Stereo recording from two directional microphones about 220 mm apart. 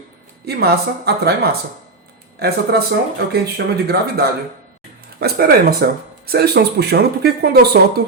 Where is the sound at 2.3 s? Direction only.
45° right (ahead or behind).